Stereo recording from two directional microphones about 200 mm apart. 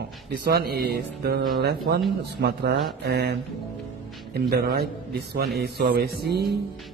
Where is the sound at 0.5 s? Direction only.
50° right (ahead or behind).